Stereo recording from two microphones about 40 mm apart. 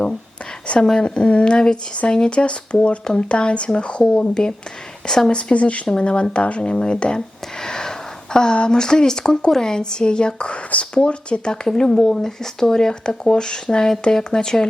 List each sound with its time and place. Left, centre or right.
0.9 s speech: left
7.6 s a sound: centre
8.5 s speech: centre